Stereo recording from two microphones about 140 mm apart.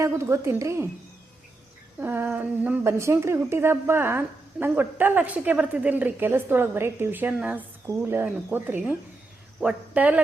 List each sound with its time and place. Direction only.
0.0 s a woman's voice: 20° right (ahead or behind)
2.0 s a woman's voice: 15° right (ahead or behind)